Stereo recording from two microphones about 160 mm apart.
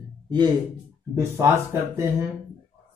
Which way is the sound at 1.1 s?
15° right (ahead or behind).